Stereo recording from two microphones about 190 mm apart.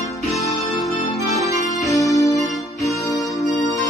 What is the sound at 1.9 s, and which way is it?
Music, 15° left (ahead or behind).